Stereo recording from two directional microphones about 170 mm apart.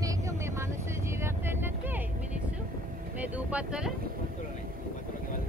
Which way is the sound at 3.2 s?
10° right (ahead or behind).